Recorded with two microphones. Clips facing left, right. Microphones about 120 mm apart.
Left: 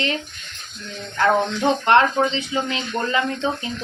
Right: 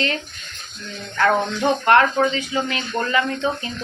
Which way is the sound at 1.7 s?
20° left (ahead or behind).